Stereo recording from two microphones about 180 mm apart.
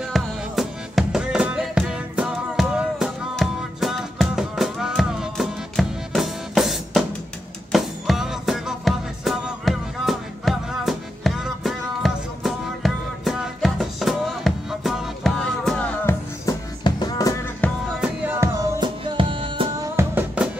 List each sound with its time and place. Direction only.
0.1 s music: centre (ahead or behind)
16.4 s music: 20° left (ahead or behind)
17.6 s music: 10° left (ahead or behind)
18.0 s music: 10° right (ahead or behind); by 19.9 s 30° right (ahead or behind)
20.0 s music: 10° right (ahead or behind)